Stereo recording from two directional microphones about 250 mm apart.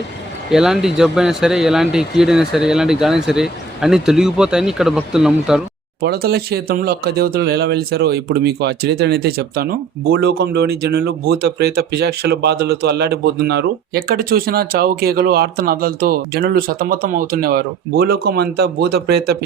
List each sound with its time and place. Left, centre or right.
0.5 s speech: centre
6.0 s speech: right